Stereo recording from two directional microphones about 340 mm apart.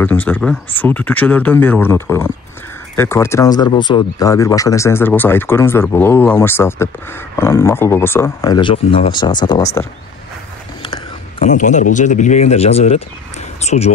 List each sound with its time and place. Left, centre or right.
0.0 s speech: centre
11.3 s speech: left